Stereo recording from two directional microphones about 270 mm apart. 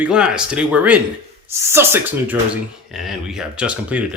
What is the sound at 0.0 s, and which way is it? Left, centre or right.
Speech, centre.